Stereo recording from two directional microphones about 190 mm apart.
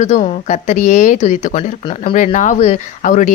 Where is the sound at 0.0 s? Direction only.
40° left (ahead or behind).